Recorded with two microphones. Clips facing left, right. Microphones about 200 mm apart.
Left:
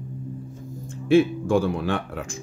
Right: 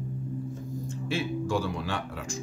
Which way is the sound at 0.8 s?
55° left (ahead or behind).